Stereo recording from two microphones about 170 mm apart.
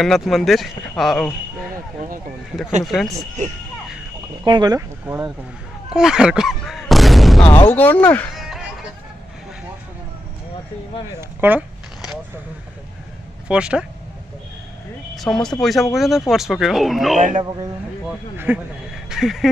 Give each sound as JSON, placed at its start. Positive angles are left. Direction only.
{"t": 0.0, "sound": "speech", "side_deg": 0}
{"t": 2.8, "sound": "speech", "side_deg": 0}
{"t": 4.5, "sound": "speech", "side_deg": -25}
{"t": 5.0, "sound": "speech", "side_deg": -10}
{"t": 5.9, "sound": "a sound", "side_deg": -5}
{"t": 7.4, "sound": "speech", "side_deg": 35}
{"t": 7.7, "sound": "speech", "side_deg": 10}
{"t": 8.4, "sound": "music", "side_deg": 0}
{"t": 11.1, "sound": "a sound", "side_deg": -10}
{"t": 13.5, "sound": "speech", "side_deg": -5}
{"t": 15.1, "sound": "speech", "side_deg": 5}
{"t": 17.4, "sound": "speech", "side_deg": -25}
{"t": 18.5, "sound": "speech", "side_deg": -10}